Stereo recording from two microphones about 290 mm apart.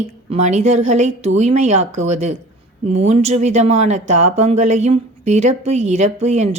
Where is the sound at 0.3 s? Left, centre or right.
Right.